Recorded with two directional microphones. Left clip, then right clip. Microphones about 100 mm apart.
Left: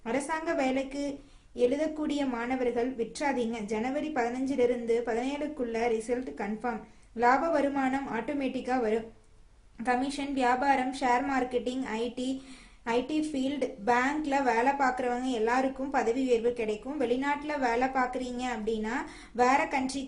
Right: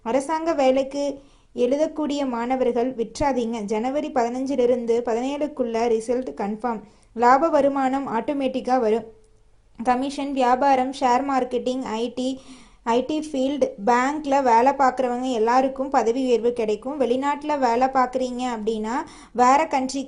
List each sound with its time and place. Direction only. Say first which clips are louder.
0.0 s a woman's voice: right 9 dB; 75° right (ahead or behind)
9.8 s a woman's voice: right 7 dB; 70° right (ahead or behind)